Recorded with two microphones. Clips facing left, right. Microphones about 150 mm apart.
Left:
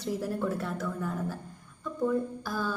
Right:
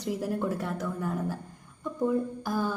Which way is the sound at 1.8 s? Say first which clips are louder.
Right 1 dB; 20° right (ahead or behind).